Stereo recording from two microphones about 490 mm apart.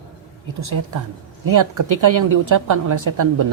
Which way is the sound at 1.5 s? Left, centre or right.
Right.